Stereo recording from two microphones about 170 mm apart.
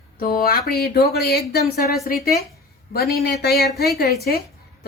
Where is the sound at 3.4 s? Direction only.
70° left (ahead or behind).